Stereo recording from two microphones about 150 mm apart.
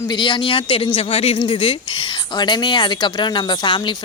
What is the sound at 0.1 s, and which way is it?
Speech, 30° left (ahead or behind).